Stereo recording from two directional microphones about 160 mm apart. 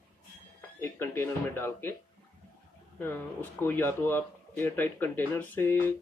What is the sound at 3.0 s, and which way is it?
Speech, 10° left (ahead or behind).